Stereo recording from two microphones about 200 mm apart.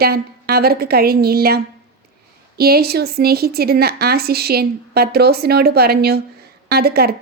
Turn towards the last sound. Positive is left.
turn(degrees=-50)  # may be behind; listen again after turning